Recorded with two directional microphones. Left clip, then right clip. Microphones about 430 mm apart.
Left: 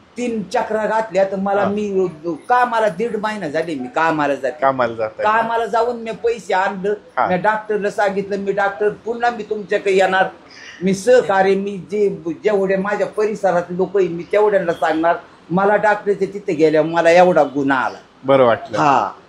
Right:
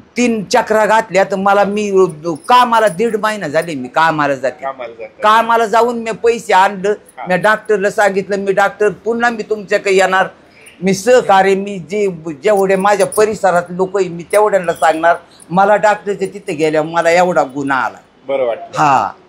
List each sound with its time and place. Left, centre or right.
0.1 s speech: right
4.6 s a man's voice: left
5.2 s a man's voice: right; by 17.8 s centre
18.2 s a man's voice: left
18.7 s speech: centre